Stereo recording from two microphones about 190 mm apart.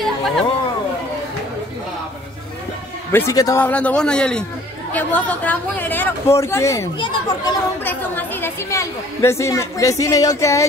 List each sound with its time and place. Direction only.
0.0 s a sound: centre (ahead or behind)
3.1 s a woman's voice: 15° left (ahead or behind)
7.0 s speech: 25° left (ahead or behind)
7.8 s a woman's voice: 10° left (ahead or behind)